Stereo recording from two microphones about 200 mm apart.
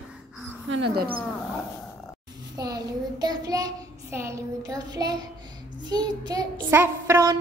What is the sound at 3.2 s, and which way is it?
Child singing, 20° right (ahead or behind).